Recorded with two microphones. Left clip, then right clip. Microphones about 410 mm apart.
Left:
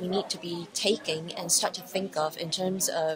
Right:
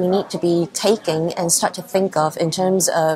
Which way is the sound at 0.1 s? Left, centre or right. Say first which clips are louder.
Right 13 dB; right.